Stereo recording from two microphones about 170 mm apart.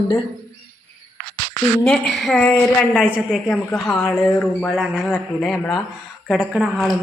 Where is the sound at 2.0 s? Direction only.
Centre (ahead or behind).